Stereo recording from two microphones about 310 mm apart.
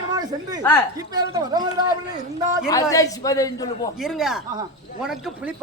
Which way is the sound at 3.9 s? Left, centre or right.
Centre.